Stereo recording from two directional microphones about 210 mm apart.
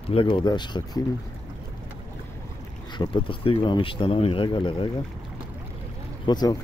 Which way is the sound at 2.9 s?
25° left (ahead or behind).